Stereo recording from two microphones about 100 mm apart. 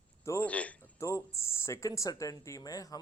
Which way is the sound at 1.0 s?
30° left (ahead or behind).